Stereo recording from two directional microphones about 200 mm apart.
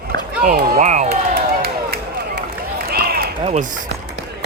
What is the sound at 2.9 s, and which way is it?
Run, 50° right (ahead or behind).